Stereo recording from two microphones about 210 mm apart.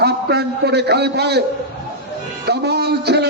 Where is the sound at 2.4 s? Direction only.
50° right (ahead or behind).